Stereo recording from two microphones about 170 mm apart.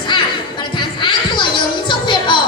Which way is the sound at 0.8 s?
30° left (ahead or behind).